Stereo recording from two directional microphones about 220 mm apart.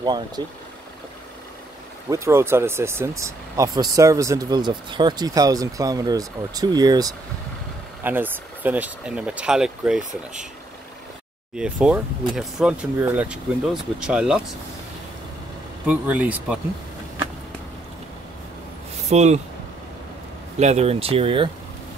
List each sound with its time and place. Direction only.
0.4 s speech: 20° right (ahead or behind)
2.0 s speech: 15° right (ahead or behind)
11.5 s speech: 5° right (ahead or behind)
15.9 s speech: 5° right (ahead or behind)
19.0 s speech: 30° right (ahead or behind)
20.5 s speech: 30° right (ahead or behind)